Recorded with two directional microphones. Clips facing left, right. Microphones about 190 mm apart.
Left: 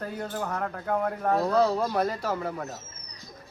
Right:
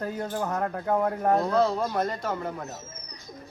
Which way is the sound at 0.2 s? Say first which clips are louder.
Right 2 dB; 30° right (ahead or behind).